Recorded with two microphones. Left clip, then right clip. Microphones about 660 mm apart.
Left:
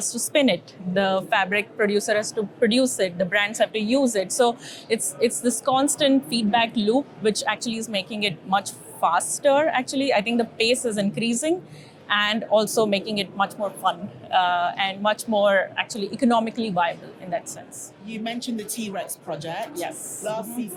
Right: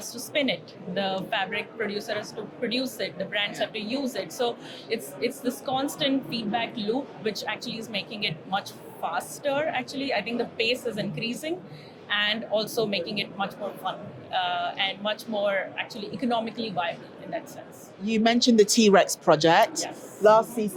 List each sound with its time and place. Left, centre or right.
0.0 s a woman's voice: left
18.0 s speech: right